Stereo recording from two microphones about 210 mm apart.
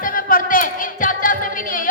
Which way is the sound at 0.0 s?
40° left (ahead or behind).